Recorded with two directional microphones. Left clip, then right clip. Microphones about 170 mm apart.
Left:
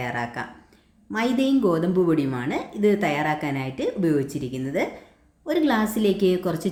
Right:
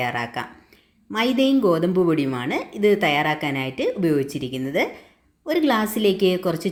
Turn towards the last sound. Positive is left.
turn(degrees=-15)  # may be behind; listen again after turning